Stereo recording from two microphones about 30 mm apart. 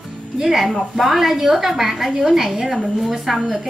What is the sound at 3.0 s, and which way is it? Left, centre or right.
Speech, centre.